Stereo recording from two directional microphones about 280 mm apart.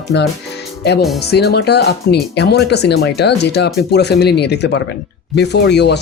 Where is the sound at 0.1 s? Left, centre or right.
Left.